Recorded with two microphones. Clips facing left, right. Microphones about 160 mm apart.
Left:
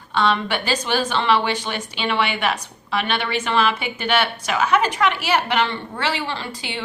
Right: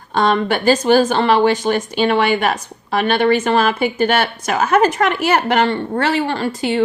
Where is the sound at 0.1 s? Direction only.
45° right (ahead or behind).